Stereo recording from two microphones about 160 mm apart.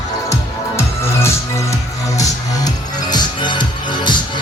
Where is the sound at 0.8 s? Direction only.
15° left (ahead or behind).